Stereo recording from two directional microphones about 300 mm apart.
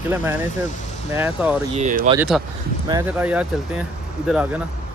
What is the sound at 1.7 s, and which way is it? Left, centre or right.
Speech, right.